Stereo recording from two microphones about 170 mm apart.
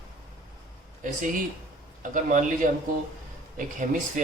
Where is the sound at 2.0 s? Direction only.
50° right (ahead or behind).